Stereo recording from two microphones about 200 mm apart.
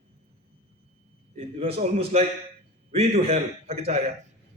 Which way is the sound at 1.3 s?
30° right (ahead or behind).